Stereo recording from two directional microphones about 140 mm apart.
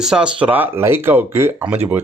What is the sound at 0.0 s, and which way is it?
A man's voice, 5° right (ahead or behind).